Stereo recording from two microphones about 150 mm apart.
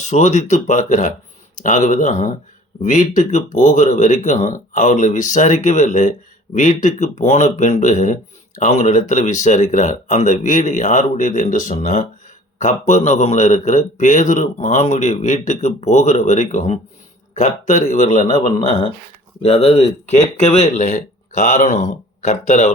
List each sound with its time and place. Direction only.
0.0 s a man's voice: 50° left (ahead or behind)
19.4 s a man's voice: 45° left (ahead or behind)